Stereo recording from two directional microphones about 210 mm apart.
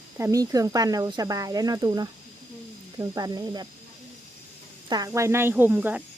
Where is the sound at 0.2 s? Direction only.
15° right (ahead or behind).